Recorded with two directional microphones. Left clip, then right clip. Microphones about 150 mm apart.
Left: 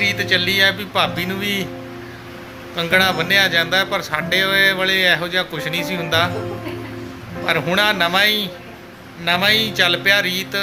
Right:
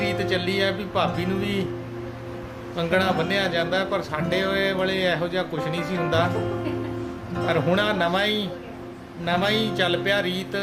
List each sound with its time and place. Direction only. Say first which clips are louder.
0.0 s speech: left 7 dB; 10° right (ahead or behind)
2.7 s speech: left 6 dB; 10° right (ahead or behind)
7.4 s speech: left 5 dB; 15° right (ahead or behind)